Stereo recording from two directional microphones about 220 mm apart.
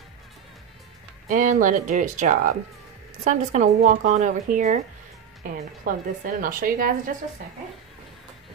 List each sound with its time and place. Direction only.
1.3 s a woman's voice: 40° right (ahead or behind)